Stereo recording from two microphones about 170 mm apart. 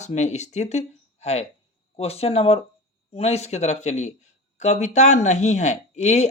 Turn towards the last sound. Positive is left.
turn(degrees=40)  # may be behind; listen again after turning